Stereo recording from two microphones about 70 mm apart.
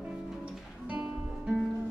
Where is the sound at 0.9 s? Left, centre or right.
Centre.